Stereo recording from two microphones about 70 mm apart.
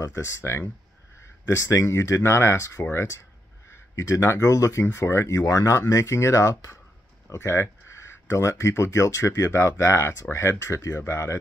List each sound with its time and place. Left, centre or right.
0.0 s speech: left